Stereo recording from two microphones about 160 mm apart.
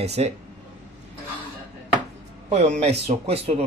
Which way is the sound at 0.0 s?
40° right (ahead or behind).